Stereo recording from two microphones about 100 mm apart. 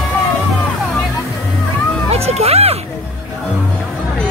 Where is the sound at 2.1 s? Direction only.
90° right.